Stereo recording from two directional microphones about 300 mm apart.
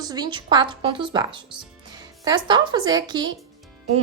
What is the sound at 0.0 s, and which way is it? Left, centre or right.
A woman's voice, centre.